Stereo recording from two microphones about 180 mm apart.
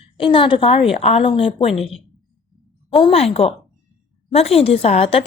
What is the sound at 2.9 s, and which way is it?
A woman's voice, 30° left (ahead or behind).